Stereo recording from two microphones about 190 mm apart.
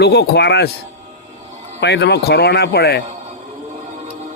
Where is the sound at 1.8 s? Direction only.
65° left (ahead or behind).